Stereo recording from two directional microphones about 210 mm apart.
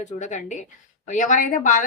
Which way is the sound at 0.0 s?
35° left (ahead or behind).